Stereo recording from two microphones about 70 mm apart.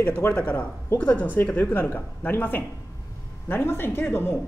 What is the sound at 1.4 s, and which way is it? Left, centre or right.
Speech, left.